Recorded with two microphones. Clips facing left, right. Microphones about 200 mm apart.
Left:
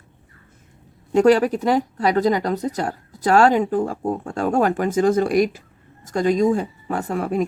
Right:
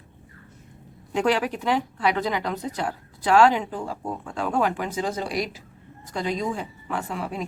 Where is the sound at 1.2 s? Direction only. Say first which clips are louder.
Left 8 dB; 40° left (ahead or behind).